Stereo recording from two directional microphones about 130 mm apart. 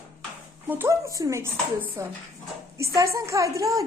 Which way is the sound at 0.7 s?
20° right (ahead or behind).